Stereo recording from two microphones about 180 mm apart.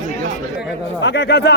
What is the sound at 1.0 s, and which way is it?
Speech, 75° left (ahead or behind).